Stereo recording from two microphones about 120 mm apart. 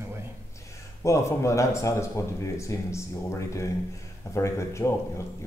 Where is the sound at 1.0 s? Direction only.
25° left (ahead or behind).